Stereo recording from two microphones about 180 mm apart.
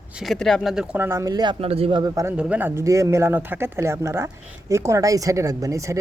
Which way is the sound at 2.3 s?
5° right (ahead or behind).